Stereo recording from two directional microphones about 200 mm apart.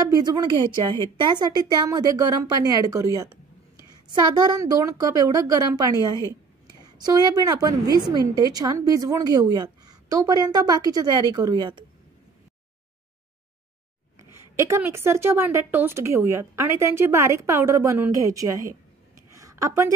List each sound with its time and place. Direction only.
0.0 s a woman's voice: 20° right (ahead or behind)
14.3 s a woman's voice: 15° right (ahead or behind)
19.3 s a sound: 15° right (ahead or behind)